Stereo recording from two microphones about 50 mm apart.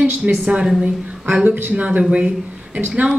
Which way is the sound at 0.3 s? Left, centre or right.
Right.